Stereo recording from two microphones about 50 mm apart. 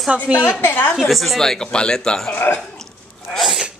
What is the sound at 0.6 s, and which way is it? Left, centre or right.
Speech, left.